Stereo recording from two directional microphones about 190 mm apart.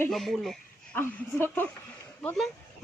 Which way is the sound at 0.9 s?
10° left (ahead or behind).